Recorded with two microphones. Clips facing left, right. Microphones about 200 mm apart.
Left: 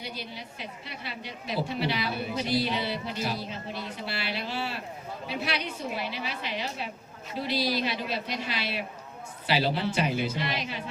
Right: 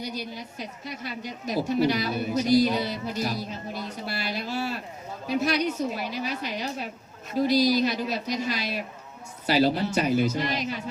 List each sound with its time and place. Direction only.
0.0 s a woman's voice: 40° right (ahead or behind)